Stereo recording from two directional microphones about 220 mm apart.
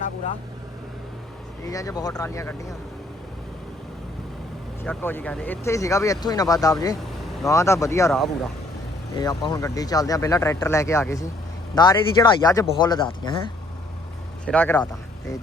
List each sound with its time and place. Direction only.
1.6 s speech: 15° left (ahead or behind)
4.8 s speech: 10° left (ahead or behind)
7.0 s vehicle: centre (ahead or behind)
7.5 s speech: 15° left (ahead or behind)
9.1 s speech: 20° left (ahead or behind)
14.4 s speech: 5° left (ahead or behind)